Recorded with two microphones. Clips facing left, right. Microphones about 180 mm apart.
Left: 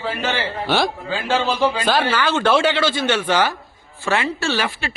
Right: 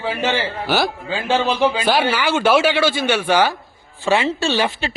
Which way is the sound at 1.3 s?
15° right (ahead or behind).